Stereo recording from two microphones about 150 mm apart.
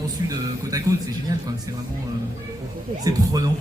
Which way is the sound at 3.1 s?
25° right (ahead or behind).